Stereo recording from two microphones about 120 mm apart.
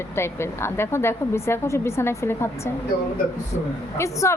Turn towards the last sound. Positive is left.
turn(degrees=25)  # may be behind; listen again after turning